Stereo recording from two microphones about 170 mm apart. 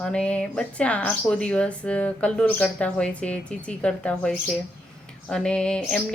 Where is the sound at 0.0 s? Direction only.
5° left (ahead or behind).